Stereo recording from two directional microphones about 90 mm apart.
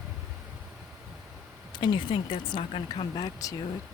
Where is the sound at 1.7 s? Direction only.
55° left (ahead or behind).